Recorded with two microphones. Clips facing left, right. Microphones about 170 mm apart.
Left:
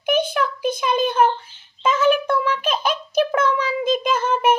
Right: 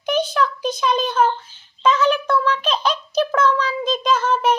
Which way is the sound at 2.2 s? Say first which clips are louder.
Right 1 dB; 10° left (ahead or behind).